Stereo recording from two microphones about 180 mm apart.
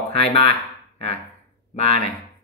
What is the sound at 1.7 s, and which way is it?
Speech, 35° left (ahead or behind).